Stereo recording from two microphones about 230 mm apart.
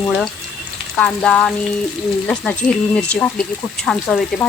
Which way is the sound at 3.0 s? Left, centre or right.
Centre.